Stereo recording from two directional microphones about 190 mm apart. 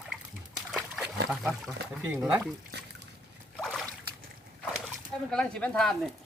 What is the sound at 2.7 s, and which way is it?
Trickle, 60° right (ahead or behind).